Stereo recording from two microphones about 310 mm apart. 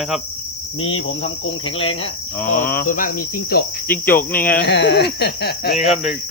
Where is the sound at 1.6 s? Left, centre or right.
Centre.